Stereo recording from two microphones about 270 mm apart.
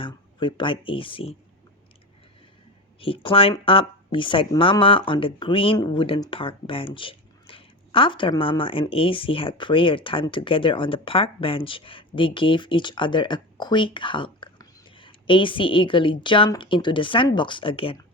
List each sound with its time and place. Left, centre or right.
0.0 s speech: centre
3.0 s speech: centre